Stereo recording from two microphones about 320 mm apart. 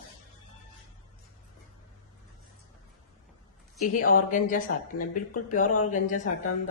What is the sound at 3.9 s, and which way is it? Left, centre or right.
Speech, left.